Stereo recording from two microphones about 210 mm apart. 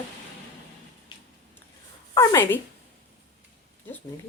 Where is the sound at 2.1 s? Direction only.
10° left (ahead or behind).